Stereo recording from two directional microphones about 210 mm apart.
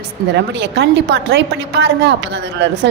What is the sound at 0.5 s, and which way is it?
A woman's voice, 55° right (ahead or behind).